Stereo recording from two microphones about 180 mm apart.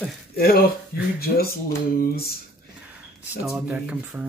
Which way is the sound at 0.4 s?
55° left (ahead or behind).